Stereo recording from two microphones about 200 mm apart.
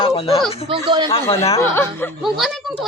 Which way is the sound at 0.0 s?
30° left (ahead or behind).